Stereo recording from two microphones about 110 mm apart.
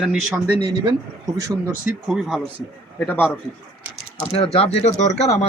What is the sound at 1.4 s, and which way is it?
Speech, 25° right (ahead or behind).